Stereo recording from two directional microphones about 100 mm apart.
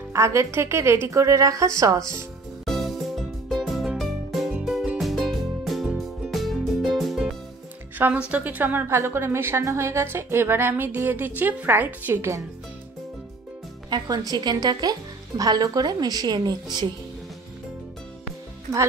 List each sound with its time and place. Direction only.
0.1 s speech: 30° right (ahead or behind)
2.6 s music: centre (ahead or behind)
8.3 s speech: 15° right (ahead or behind)
13.8 s speech: 45° right (ahead or behind)